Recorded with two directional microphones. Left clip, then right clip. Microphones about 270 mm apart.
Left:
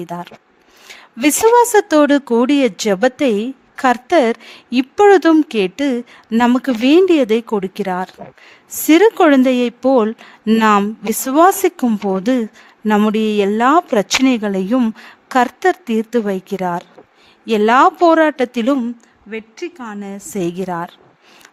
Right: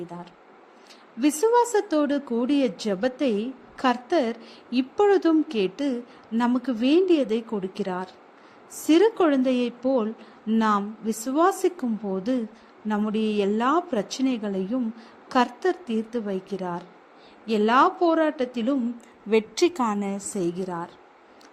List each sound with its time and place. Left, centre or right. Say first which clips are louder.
0.1 s speech: left 13 dB; left
19.3 s a woman's voice: right 6 dB; centre
20.1 s speech: left 7 dB; left